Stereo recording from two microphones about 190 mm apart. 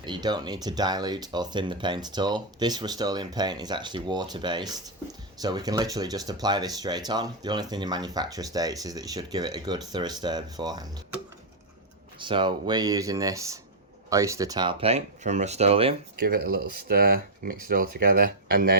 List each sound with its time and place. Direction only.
0.0 s speech: 25° right (ahead or behind)
12.2 s speech: 25° right (ahead or behind)
16.1 s speech: 50° right (ahead or behind)